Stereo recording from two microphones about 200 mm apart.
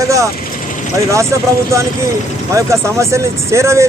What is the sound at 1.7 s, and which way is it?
Speech, 15° right (ahead or behind).